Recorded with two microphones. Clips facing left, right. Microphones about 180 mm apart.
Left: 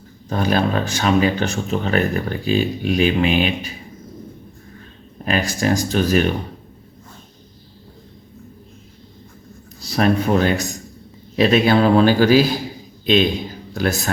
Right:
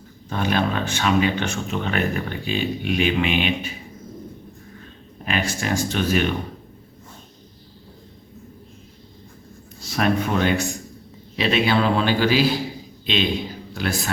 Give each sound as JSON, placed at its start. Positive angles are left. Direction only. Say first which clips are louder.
{"t": 0.3, "sound": "speech", "louder": "left 3 dB", "side_deg": 40}
{"t": 5.2, "sound": "speech", "louder": "left 5 dB", "side_deg": 40}
{"t": 9.8, "sound": "a man's voice", "louder": "left 4 dB", "side_deg": 35}
{"t": 13.7, "sound": "a man's voice", "louder": "left 5 dB", "side_deg": 45}